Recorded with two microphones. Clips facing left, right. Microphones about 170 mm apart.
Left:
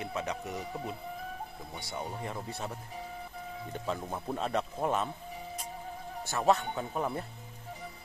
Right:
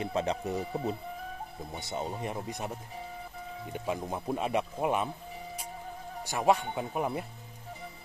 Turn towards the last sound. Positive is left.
turn(degrees=-15)  # may be behind; listen again after turning